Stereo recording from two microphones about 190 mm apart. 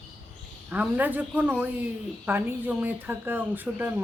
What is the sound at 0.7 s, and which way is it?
Speech, 10° right (ahead or behind).